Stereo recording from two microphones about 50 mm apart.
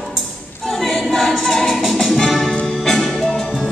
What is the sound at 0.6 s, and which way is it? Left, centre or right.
Music, centre.